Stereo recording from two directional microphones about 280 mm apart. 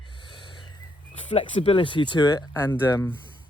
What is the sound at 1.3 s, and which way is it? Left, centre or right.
Speech, centre.